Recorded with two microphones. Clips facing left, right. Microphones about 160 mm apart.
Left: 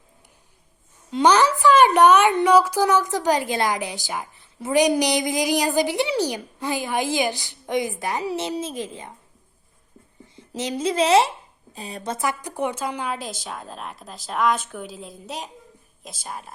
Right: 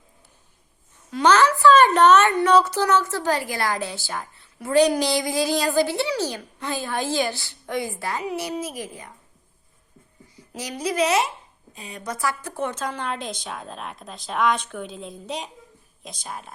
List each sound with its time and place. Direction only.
1.1 s a woman's voice: 15° left (ahead or behind)
10.3 s a woman's voice: 25° left (ahead or behind); by 16.5 s centre (ahead or behind)